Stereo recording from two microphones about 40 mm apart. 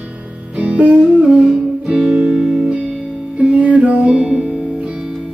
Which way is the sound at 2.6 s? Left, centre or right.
Right.